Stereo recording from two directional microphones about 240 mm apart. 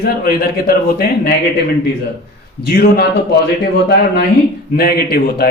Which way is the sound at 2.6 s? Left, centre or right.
Left.